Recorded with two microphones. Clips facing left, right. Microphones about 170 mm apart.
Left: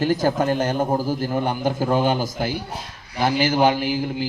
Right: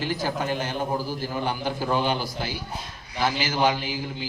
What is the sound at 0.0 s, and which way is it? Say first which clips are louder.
A man's voice: left 8 dB; 45° left (ahead or behind).